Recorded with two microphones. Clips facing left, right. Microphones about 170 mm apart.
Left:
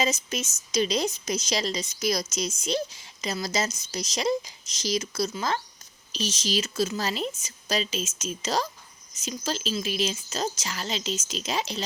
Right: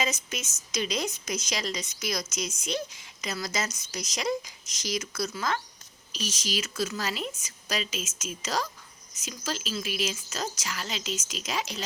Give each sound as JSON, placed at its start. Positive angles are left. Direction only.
{"t": 0.0, "sound": "a woman's voice", "side_deg": 30}